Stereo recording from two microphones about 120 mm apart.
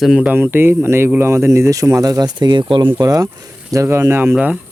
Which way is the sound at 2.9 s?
30° right (ahead or behind).